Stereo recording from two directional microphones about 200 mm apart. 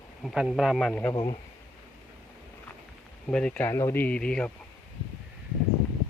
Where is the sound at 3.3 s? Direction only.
5° left (ahead or behind).